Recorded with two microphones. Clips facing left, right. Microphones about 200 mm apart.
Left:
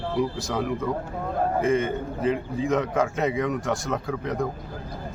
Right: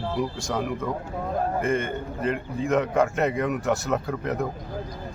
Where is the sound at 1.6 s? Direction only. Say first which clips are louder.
Left 3 dB; centre (ahead or behind).